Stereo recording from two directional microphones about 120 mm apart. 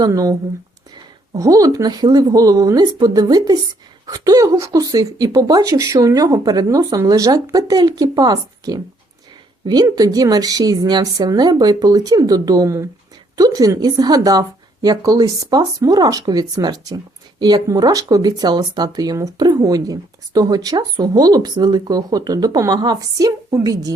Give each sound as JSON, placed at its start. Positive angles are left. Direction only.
{"t": 0.0, "sound": "speech", "side_deg": -30}
{"t": 9.9, "sound": "speech", "side_deg": -30}